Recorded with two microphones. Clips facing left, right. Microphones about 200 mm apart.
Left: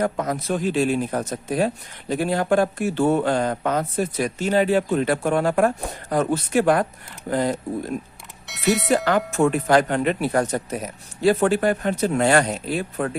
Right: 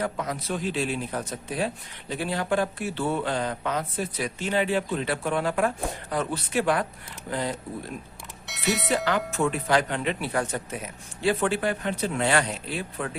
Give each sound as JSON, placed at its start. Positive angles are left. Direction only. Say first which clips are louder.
{"t": 0.0, "sound": "speech", "louder": "left 6 dB", "side_deg": 45}
{"t": 8.4, "sound": "doorbell", "louder": "left 6 dB", "side_deg": 0}
{"t": 9.3, "sound": "speech", "louder": "left 7 dB", "side_deg": 45}